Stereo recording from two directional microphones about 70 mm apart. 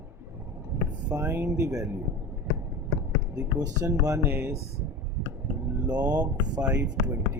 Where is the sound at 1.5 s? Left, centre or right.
Right.